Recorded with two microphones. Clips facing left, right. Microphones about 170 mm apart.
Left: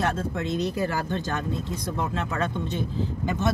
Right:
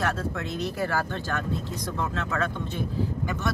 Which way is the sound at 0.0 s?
20° left (ahead or behind).